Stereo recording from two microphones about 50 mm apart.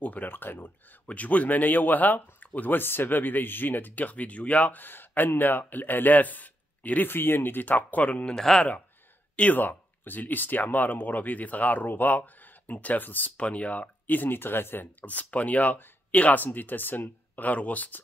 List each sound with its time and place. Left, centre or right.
0.0 s speech: left
1.0 s speech: left
4.8 s speech: left
8.3 s speech: centre
9.4 s speech: left